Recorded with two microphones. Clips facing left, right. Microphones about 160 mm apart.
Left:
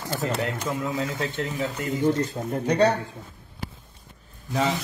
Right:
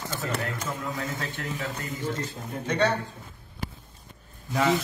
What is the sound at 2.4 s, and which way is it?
Speech, 50° left (ahead or behind).